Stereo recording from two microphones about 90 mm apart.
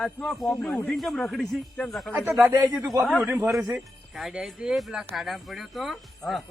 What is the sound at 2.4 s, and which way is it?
Speech, 25° right (ahead or behind).